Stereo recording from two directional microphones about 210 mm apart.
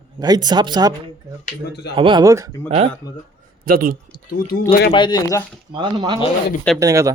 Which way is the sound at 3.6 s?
45° right (ahead or behind).